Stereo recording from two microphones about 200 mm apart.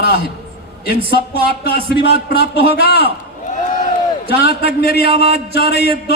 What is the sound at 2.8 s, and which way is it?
Speech, 50° left (ahead or behind).